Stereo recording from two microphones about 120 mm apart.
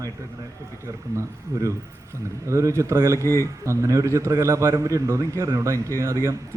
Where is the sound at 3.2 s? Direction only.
25° left (ahead or behind).